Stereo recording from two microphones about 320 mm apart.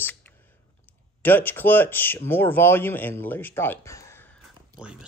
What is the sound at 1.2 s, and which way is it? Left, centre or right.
Speech, centre.